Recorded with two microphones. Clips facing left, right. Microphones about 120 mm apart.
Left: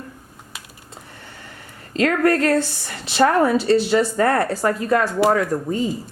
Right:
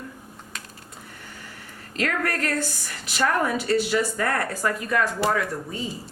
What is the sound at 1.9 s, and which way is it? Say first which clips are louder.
A woman's voice: left 9 dB; 30° left (ahead or behind).